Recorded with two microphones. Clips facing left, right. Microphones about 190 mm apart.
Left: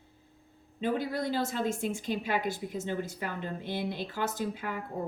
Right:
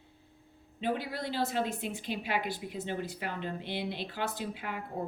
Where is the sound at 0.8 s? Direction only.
45° left (ahead or behind).